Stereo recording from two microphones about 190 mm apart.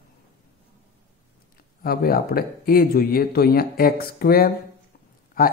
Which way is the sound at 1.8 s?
50° left (ahead or behind).